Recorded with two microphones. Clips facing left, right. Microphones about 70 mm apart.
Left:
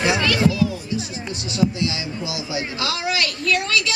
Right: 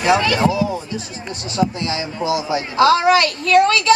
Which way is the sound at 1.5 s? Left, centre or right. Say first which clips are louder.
Right 2 dB; right.